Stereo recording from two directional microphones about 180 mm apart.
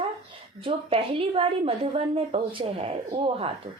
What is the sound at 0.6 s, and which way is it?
Speech, 30° right (ahead or behind).